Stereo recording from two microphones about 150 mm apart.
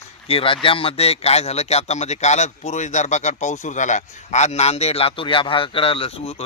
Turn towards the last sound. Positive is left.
turn(degrees=40)  # may be behind; listen again after turning